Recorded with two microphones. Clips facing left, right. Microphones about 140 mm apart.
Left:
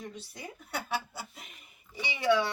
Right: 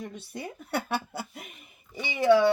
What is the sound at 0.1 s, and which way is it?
Speech, 55° right (ahead or behind).